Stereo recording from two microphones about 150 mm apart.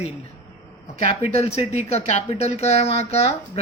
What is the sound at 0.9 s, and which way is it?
Speech, 45° left (ahead or behind).